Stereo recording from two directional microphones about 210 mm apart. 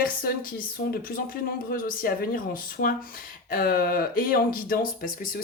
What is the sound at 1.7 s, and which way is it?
Speech, 45° left (ahead or behind).